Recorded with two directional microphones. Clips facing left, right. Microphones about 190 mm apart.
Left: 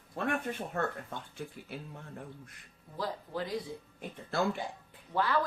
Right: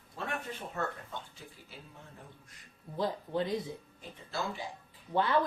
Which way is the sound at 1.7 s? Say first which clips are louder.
Left 7 dB; 60° left (ahead or behind).